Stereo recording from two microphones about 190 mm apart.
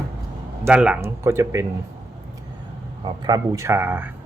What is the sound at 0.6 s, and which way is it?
Speech, 5° right (ahead or behind).